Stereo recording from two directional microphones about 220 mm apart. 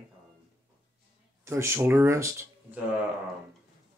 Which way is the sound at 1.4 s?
10° right (ahead or behind).